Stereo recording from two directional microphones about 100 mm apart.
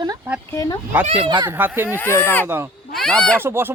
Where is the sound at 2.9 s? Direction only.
5° left (ahead or behind).